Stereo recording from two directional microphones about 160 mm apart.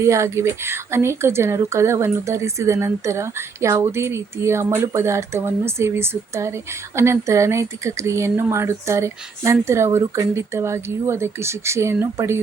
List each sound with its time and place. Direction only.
0.0 s speech: 20° right (ahead or behind)